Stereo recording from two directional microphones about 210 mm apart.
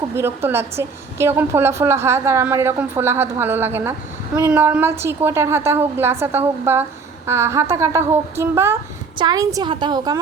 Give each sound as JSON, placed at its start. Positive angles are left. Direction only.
{"t": 0.1, "sound": "a woman's voice", "side_deg": -10}